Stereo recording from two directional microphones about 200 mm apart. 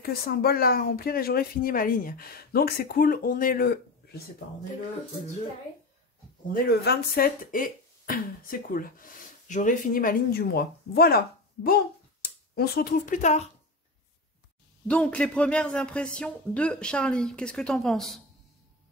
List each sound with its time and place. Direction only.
0.0 s speech: 50° left (ahead or behind)
6.5 s speech: 55° left (ahead or behind); by 13.5 s 35° left (ahead or behind)
14.9 s a man's voice: 5° left (ahead or behind)